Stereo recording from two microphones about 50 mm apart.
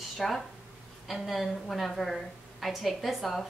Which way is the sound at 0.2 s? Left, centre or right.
Centre.